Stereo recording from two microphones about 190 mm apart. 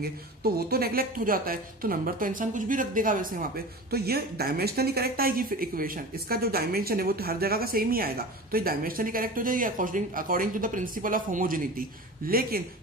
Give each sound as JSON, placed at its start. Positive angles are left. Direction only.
{"t": 0.0, "sound": "a woman's voice", "side_deg": -55}